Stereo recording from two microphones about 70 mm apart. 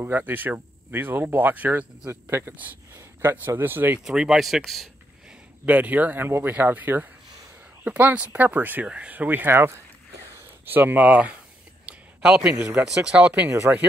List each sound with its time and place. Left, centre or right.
0.0 s speech: right
2.0 s speech: right
4.0 s speech: centre
5.7 s speech: right
11.8 s a sound: centre
12.8 s speech: centre